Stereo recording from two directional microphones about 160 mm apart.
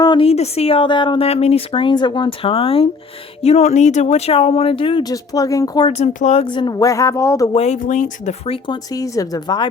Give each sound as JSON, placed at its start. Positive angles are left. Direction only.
{"t": 0.0, "sound": "a woman's voice", "side_deg": 30}
{"t": 5.9, "sound": "speech", "side_deg": 45}
{"t": 7.5, "sound": "a woman's voice", "side_deg": 45}